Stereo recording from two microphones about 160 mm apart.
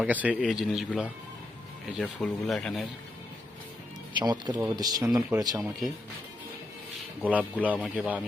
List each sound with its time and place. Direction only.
0.0 s speech: 10° right (ahead or behind)
4.2 s speech: 25° right (ahead or behind)
7.2 s speech: 10° right (ahead or behind)